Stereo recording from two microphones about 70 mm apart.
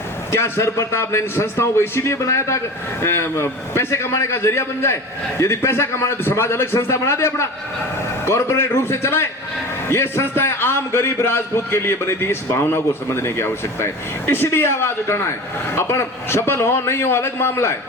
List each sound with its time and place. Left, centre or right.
0.3 s a man's voice: left